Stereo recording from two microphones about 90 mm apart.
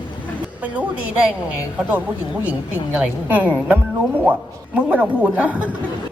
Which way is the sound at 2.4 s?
15° right (ahead or behind).